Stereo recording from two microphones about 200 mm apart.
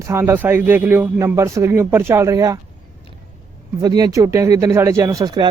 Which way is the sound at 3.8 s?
20° right (ahead or behind).